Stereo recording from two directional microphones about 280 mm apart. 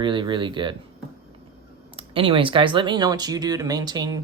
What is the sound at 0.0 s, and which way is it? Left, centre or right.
Speech, centre.